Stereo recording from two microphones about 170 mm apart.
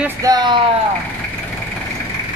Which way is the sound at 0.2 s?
25° right (ahead or behind).